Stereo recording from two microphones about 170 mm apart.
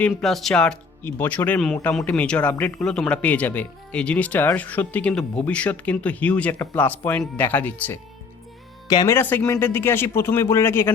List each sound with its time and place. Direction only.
0.1 s speech: centre (ahead or behind)
8.9 s speech: 25° left (ahead or behind)
9.1 s speech: 10° left (ahead or behind)